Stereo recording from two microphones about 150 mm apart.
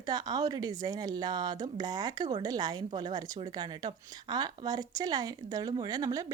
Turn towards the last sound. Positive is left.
turn(degrees=-25)  # may be behind; listen again after turning